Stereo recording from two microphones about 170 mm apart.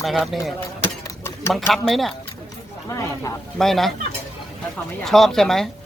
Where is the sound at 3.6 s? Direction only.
Centre (ahead or behind).